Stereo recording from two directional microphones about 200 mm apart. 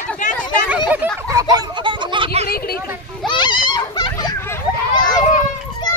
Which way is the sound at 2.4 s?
50° left (ahead or behind).